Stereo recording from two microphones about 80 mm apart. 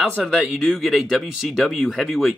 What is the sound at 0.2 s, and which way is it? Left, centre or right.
Speech, centre.